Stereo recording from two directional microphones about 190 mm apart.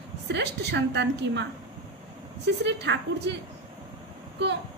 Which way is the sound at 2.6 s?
65° right (ahead or behind).